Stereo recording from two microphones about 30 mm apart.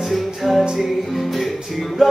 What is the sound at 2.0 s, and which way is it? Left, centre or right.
Music, centre.